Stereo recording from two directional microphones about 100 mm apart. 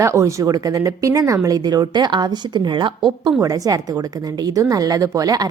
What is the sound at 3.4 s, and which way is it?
A woman's voice, 35° right (ahead or behind).